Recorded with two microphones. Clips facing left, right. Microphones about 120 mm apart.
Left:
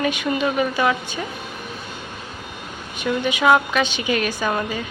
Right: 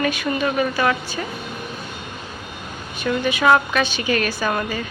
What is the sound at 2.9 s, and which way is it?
Speech, 15° left (ahead or behind).